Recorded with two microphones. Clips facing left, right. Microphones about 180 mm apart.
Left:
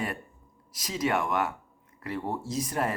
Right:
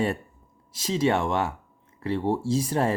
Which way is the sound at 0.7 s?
25° right (ahead or behind).